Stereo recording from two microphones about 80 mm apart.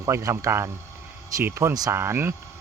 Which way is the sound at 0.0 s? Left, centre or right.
Right.